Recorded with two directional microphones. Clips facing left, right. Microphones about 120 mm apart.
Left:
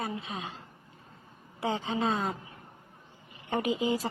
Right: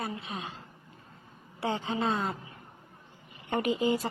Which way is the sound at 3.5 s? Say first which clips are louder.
Right 1 dB; 5° left (ahead or behind).